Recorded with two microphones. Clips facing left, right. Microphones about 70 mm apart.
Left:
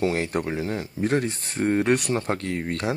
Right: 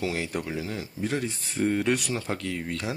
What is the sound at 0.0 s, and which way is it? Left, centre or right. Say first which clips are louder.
Speech: left 5 dB; left.